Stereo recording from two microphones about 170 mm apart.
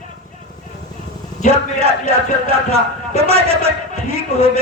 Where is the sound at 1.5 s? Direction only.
35° right (ahead or behind).